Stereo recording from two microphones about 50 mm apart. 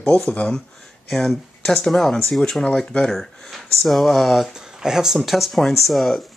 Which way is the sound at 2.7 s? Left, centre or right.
Centre.